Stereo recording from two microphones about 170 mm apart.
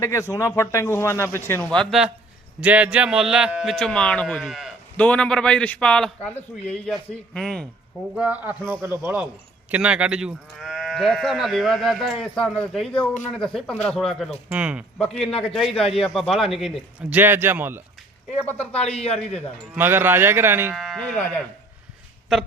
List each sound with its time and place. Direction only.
0.0 s a man's voice: 15° left (ahead or behind); by 15.0 s 5° right (ahead or behind)
15.0 s speech: 5° left (ahead or behind)
17.2 s a man's voice: 10° right (ahead or behind)
18.4 s speech: 10° left (ahead or behind)
18.9 s speech: 35° left (ahead or behind)
19.7 s a man's voice: 10° right (ahead or behind)
20.7 s speech: centre (ahead or behind)